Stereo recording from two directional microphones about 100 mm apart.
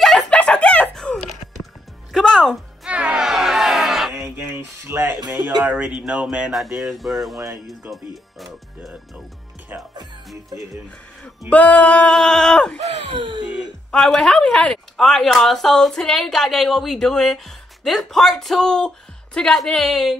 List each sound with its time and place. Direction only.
0.0 s chicken: 5° left (ahead or behind)
2.1 s music: 5° left (ahead or behind)
2.9 s music: 10° right (ahead or behind)
4.8 s speech: 25° right (ahead or behind)
5.6 s speech: 10° right (ahead or behind)
7.3 s speech: 35° right (ahead or behind)
7.9 s speech: centre (ahead or behind)
9.7 s music: 20° right (ahead or behind)
11.5 s a sound: 15° left (ahead or behind)
13.1 s a sound: 55° right (ahead or behind)
13.9 s speech: 5° left (ahead or behind)